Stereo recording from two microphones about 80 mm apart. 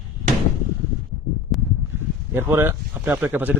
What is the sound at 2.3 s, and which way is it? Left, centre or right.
Speech, right.